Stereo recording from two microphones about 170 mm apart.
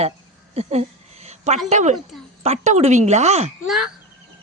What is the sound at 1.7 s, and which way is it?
A woman's voice, 45° right (ahead or behind).